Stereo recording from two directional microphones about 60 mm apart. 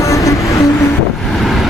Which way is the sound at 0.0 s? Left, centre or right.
Left.